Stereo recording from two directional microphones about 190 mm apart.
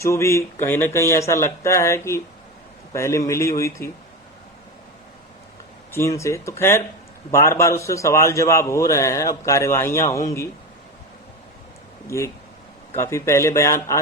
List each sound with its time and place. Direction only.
0.0 s speech: 15° left (ahead or behind)
5.9 s speech: 15° left (ahead or behind)
12.0 s speech: 15° left (ahead or behind)